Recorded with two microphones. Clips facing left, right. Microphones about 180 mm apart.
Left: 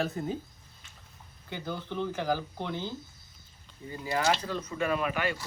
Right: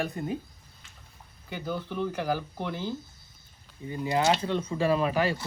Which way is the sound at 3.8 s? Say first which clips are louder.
Right 3 dB; 20° right (ahead or behind).